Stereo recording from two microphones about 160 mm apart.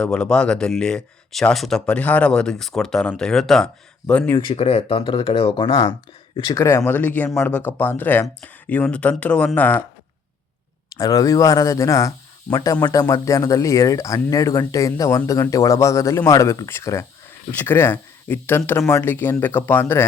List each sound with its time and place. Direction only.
0.0 s speech: 5° left (ahead or behind)
4.4 s speech: 35° left (ahead or behind); by 9.8 s 10° left (ahead or behind)
10.9 s speech: 20° left (ahead or behind)